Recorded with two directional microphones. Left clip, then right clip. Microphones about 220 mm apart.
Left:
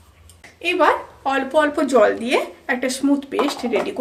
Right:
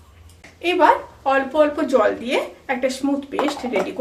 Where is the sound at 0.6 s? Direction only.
35° left (ahead or behind).